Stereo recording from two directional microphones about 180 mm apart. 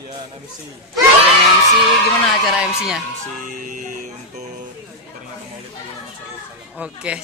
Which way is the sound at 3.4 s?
45° right (ahead or behind).